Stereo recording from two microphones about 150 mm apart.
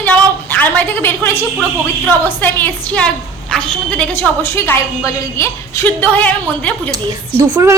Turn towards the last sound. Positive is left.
turn(degrees=-20)  # may be behind; listen again after turning